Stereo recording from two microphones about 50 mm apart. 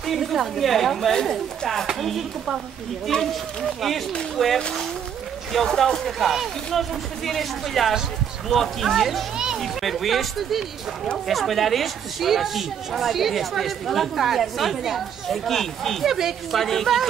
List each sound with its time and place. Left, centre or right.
0.0 s speech: centre
3.1 s speech: centre
4.4 s speech: centre
16.1 s a woman's voice: centre
16.5 s speech: centre